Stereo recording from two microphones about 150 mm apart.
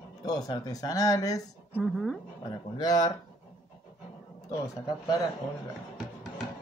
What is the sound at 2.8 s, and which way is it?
Speech, 25° left (ahead or behind).